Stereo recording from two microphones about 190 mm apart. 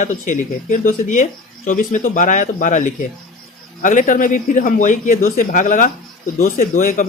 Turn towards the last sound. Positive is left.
turn(degrees=45)  # may be behind; listen again after turning